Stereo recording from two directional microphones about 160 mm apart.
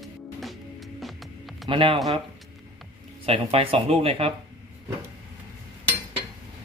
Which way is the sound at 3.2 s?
35° right (ahead or behind).